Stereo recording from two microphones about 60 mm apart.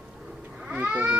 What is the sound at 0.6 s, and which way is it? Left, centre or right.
Cat, right.